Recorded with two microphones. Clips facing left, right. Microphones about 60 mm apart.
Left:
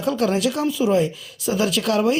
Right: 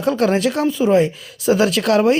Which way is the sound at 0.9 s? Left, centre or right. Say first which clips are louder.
Right 4 dB; right.